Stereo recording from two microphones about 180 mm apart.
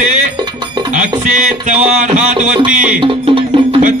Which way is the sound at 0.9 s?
45° right (ahead or behind).